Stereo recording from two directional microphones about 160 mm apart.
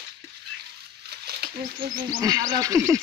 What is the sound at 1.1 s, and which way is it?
Wild animals, 80° right.